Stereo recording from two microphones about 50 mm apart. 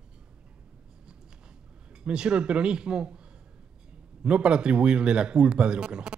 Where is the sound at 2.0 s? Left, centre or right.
Centre.